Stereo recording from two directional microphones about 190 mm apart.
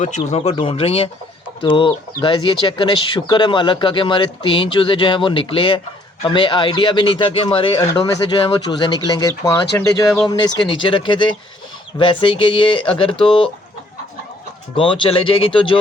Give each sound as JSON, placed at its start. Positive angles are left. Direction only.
{"t": 0.0, "sound": "speech", "side_deg": 35}
{"t": 14.8, "sound": "speech", "side_deg": 25}